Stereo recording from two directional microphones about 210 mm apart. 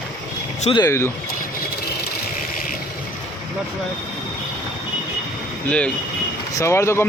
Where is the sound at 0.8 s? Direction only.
15° left (ahead or behind).